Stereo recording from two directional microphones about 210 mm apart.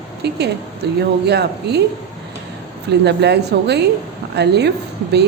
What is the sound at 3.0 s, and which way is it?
A woman's voice, 55° right (ahead or behind).